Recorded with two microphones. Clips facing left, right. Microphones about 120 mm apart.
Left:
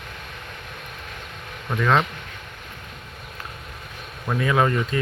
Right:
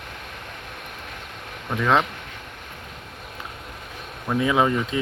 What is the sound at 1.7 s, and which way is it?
Speech, 15° right (ahead or behind).